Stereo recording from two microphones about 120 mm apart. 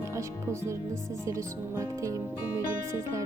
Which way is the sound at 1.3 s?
25° right (ahead or behind).